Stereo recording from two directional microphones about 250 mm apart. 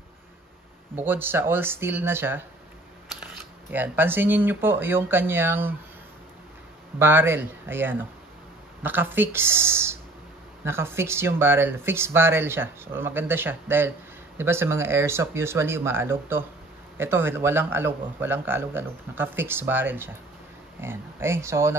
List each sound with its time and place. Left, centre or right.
0.9 s speech: centre
3.7 s speech: centre
7.0 s speech: centre